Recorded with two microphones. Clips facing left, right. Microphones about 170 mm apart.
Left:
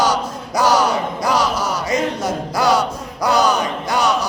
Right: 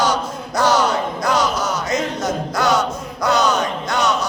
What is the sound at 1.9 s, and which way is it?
Music, 10° left (ahead or behind).